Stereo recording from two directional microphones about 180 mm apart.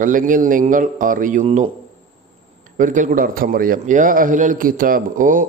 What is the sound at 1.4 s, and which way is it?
Speech, 35° right (ahead or behind).